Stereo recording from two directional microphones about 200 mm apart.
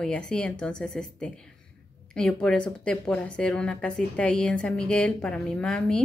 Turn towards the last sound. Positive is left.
turn(degrees=5)  # may be behind; listen again after turning